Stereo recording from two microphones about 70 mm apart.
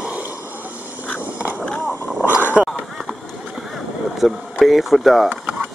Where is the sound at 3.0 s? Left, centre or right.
Centre.